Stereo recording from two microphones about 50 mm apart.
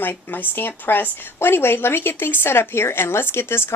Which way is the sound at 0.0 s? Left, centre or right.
Left.